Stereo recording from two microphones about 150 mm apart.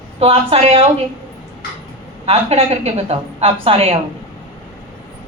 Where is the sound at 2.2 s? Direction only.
45° right (ahead or behind).